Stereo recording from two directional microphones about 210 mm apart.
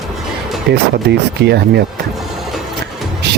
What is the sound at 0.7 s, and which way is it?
Speech, 50° right (ahead or behind).